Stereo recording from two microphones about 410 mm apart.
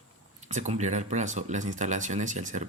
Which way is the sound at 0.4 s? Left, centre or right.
Centre.